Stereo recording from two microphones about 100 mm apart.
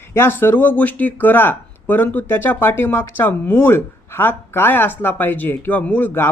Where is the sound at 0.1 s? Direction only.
25° left (ahead or behind).